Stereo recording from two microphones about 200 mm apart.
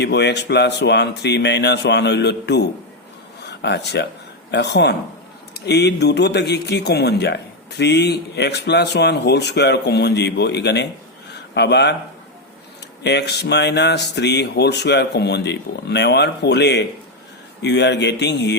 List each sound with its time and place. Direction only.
0.0 s speech: 60° left (ahead or behind)
13.0 s speech: 55° left (ahead or behind)